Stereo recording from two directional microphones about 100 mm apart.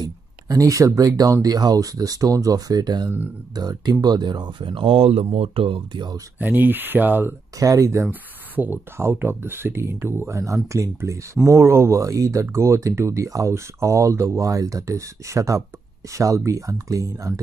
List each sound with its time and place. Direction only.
0.0 s speech: 35° right (ahead or behind); by 6.1 s 55° right (ahead or behind)
6.3 s speech: 20° right (ahead or behind)
7.5 s speech: 35° right (ahead or behind)
8.1 s speech: 20° right (ahead or behind); by 17.3 s 35° right (ahead or behind)